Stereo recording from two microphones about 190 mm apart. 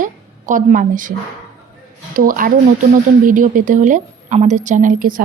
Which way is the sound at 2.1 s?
45° right (ahead or behind).